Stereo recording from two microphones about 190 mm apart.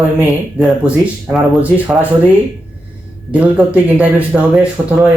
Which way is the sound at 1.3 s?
5° right (ahead or behind).